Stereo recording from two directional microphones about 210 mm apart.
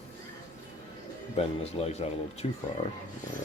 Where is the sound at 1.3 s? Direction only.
30° left (ahead or behind).